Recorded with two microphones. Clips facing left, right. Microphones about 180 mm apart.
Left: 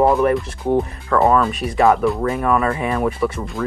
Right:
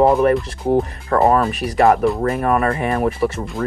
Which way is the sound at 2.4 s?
45° right (ahead or behind).